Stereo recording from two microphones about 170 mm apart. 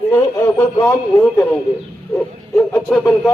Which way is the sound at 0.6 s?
20° left (ahead or behind).